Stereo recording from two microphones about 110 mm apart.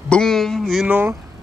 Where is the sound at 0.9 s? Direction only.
20° right (ahead or behind).